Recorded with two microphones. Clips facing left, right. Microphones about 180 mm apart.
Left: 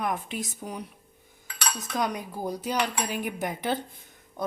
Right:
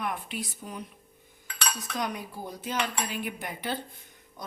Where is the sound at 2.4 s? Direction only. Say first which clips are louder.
Left 4 dB; 40° left (ahead or behind).